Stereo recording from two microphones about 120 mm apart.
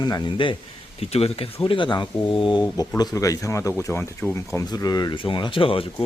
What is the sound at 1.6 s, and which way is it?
Speech, 45° left (ahead or behind).